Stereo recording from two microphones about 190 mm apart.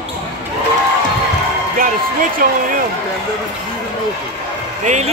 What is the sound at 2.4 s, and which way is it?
Speech, 50° right (ahead or behind).